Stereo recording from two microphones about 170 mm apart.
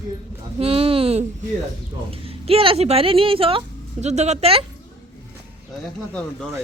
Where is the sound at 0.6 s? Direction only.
35° right (ahead or behind).